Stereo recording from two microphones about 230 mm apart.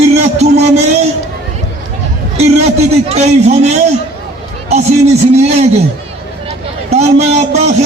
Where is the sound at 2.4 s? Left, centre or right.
Right.